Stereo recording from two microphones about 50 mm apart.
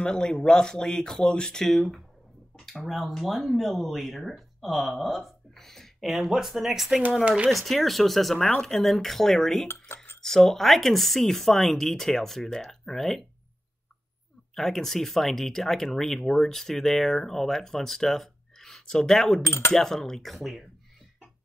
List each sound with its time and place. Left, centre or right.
0.0 s speech: centre
7.2 s speech: right
7.5 s speech: centre
8.4 s speech: centre
8.6 s speech: centre
14.5 s speech: centre